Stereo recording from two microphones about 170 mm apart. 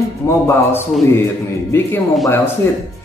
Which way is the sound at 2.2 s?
15° left (ahead or behind).